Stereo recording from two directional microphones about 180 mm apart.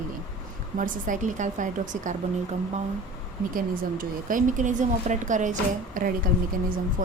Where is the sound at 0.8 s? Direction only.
45° right (ahead or behind).